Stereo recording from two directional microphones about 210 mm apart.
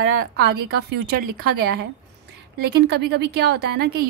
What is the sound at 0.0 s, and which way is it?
A woman's voice, 45° right (ahead or behind).